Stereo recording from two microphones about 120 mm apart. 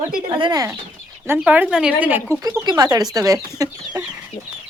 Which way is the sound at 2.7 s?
35° right (ahead or behind).